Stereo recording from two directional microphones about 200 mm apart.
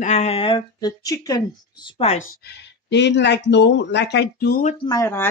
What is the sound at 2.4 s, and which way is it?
Speech, 55° left (ahead or behind).